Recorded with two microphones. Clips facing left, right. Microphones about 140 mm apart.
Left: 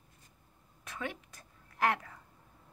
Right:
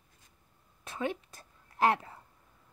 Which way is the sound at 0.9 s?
25° right (ahead or behind).